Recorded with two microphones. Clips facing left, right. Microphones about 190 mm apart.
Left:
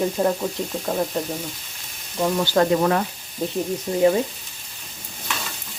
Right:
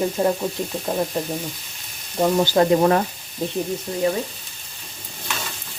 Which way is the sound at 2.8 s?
35° right (ahead or behind).